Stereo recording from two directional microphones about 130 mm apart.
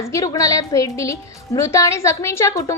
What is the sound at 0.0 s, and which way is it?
A woman's voice, 25° left (ahead or behind).